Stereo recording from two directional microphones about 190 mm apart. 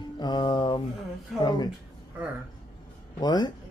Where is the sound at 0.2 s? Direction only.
20° left (ahead or behind).